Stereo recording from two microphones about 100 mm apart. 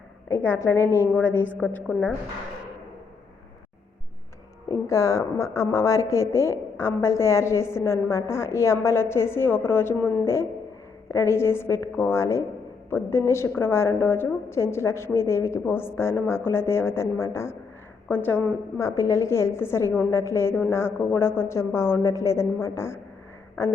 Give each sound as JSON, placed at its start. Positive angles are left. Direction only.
{"t": 0.3, "sound": "a woman's voice", "side_deg": 20}
{"t": 4.7, "sound": "a woman's voice", "side_deg": 30}